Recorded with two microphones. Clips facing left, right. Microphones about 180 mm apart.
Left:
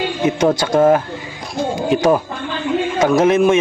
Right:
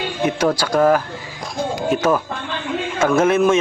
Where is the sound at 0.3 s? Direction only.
20° left (ahead or behind).